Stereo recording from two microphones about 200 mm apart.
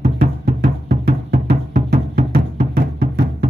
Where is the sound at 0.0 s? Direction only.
35° right (ahead or behind).